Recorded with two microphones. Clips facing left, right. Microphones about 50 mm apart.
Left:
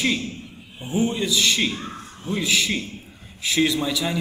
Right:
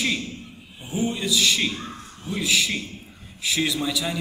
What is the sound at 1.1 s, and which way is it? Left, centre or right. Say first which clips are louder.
A man's voice: left 1 dB; centre.